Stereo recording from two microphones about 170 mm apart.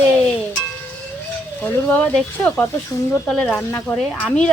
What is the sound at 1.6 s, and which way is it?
Speech, 10° left (ahead or behind).